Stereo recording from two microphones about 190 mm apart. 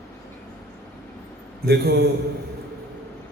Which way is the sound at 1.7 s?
55° right (ahead or behind).